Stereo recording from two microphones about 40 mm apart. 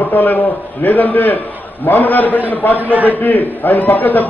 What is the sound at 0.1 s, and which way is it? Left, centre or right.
A man's voice, left.